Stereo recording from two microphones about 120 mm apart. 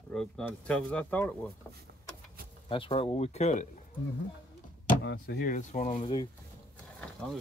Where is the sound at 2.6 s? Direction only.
45° left (ahead or behind); by 3.6 s 70° left (ahead or behind).